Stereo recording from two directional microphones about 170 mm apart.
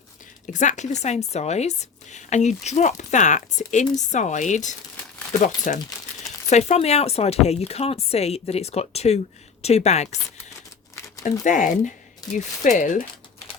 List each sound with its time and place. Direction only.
0.4 s a woman's voice: 45° left (ahead or behind)
11.2 s a woman's voice: 50° left (ahead or behind)